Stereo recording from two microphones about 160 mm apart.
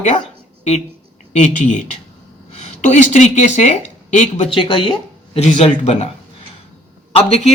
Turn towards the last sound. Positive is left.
turn(degrees=40)  # may be behind; listen again after turning